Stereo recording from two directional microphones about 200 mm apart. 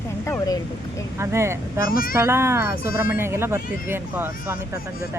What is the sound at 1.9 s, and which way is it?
Speech, 45° left (ahead or behind).